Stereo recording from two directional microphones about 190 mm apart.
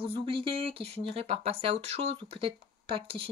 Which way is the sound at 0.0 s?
30° right (ahead or behind).